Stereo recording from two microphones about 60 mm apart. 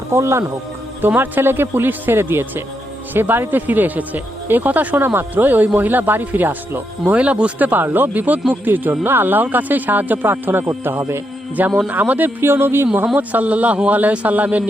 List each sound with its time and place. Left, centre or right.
0.1 s speech: right
1.0 s speech: right
7.0 s a man's voice: right
7.7 s speech: right
11.9 s a man's voice: right
12.4 s speech: right
13.1 s a man's voice: right